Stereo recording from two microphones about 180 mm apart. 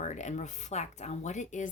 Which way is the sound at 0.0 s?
40° left (ahead or behind).